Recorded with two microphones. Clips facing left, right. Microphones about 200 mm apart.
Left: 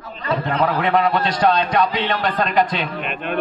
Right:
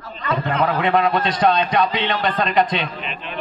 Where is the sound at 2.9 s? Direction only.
55° left (ahead or behind).